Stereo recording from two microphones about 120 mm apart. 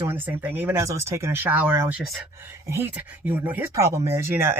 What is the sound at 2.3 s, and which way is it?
Speech, 20° right (ahead or behind).